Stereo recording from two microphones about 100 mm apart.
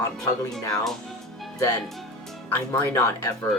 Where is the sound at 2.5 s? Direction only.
20° left (ahead or behind).